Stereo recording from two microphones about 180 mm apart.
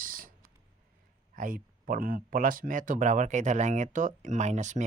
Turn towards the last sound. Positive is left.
turn(degrees=-40)  # may be behind; listen again after turning